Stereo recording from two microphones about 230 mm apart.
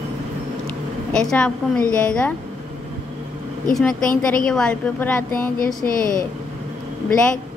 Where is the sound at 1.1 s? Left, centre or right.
Centre.